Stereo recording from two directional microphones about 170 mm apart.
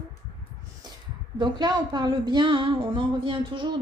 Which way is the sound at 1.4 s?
25° right (ahead or behind).